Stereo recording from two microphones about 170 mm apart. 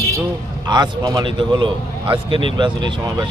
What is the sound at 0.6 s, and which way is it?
Speech, 25° right (ahead or behind).